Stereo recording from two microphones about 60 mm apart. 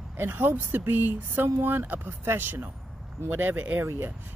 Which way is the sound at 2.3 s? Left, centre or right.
Right.